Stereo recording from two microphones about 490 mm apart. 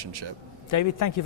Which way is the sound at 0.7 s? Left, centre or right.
Left.